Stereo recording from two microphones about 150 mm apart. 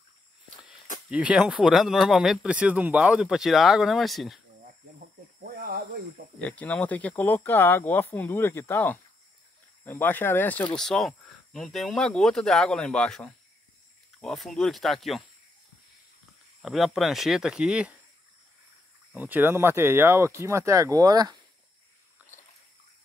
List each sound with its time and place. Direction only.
1.1 s speech: 5° right (ahead or behind)
5.4 s snake: 85° right
6.4 s speech: 10° left (ahead or behind)
16.6 s speech: centre (ahead or behind)
19.1 s speech: 15° right (ahead or behind)
22.2 s a sound: 10° right (ahead or behind)